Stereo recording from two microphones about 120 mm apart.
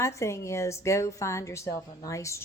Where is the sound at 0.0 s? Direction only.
25° left (ahead or behind).